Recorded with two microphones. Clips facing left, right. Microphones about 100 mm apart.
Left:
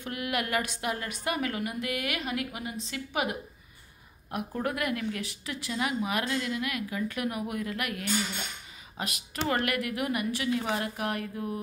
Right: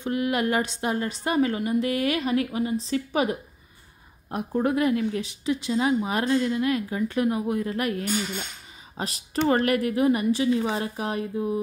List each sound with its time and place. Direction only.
0.0 s a woman's voice: 30° right (ahead or behind)